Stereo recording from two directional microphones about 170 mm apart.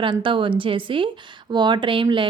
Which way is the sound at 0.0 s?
30° right (ahead or behind).